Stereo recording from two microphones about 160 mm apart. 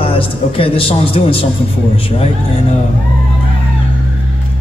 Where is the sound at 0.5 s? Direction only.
35° left (ahead or behind).